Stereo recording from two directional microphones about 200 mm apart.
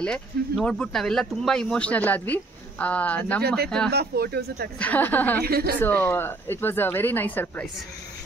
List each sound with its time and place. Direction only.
0.0 s speech: 5° left (ahead or behind)
3.9 s speech: 50° right (ahead or behind)
4.7 s speech: 5° left (ahead or behind)
5.4 s speech: 50° right (ahead or behind)
5.8 s speech: 10° left (ahead or behind)